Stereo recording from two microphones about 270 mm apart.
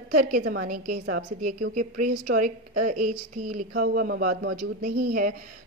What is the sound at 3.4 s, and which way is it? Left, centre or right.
Speech, right.